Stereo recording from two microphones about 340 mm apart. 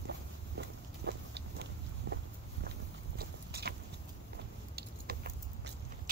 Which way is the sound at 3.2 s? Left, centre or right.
Right.